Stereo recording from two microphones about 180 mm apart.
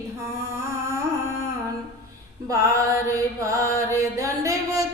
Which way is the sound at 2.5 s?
20° right (ahead or behind).